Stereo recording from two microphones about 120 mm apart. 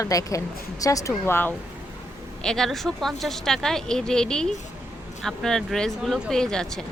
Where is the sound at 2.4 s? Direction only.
5° left (ahead or behind).